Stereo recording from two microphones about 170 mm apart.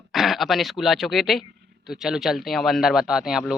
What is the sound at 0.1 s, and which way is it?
Speech, centre (ahead or behind).